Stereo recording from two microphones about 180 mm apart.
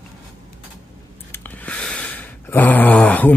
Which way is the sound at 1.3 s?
10° left (ahead or behind).